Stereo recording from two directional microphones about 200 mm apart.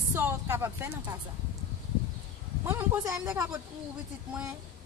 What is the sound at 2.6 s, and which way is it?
Speech, 10° right (ahead or behind).